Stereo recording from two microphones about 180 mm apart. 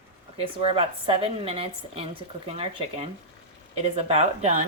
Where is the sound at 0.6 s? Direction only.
30° right (ahead or behind).